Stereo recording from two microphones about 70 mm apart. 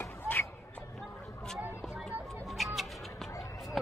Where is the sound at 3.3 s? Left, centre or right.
Left.